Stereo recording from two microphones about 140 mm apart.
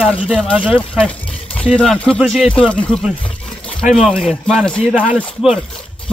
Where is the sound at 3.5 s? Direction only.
5° left (ahead or behind).